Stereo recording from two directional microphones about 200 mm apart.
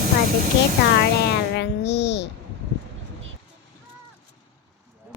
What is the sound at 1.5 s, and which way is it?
Music, 60° left (ahead or behind).